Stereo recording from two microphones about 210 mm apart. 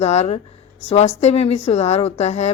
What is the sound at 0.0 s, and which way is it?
A woman's voice, 30° left (ahead or behind).